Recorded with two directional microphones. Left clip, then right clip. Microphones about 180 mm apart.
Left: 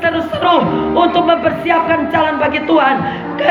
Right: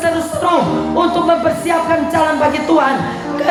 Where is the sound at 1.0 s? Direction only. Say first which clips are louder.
Left 2 dB; 30° right (ahead or behind).